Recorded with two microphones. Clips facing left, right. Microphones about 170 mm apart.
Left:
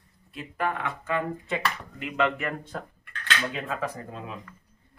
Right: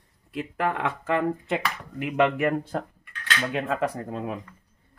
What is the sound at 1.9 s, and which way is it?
Speech, 60° right (ahead or behind).